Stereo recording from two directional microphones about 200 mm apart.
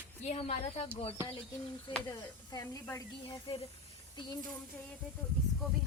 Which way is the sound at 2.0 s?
20° left (ahead or behind).